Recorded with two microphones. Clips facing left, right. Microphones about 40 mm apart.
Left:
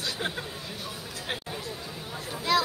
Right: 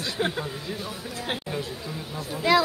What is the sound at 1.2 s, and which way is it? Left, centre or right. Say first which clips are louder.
Chatter: right 5 dB; right.